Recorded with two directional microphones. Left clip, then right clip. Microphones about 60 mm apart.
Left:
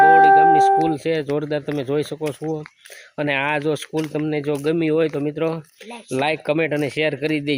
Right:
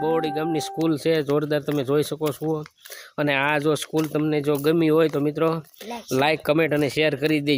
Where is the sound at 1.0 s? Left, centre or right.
Right.